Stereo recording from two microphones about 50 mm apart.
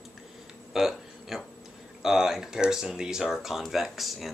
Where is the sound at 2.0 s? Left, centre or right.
Centre.